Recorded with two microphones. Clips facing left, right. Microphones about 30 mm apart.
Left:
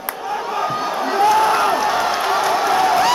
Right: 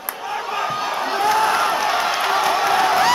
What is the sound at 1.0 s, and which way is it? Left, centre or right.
Crowd, centre.